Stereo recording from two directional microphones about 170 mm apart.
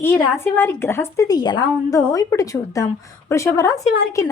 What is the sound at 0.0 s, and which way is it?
A woman's voice, 15° left (ahead or behind).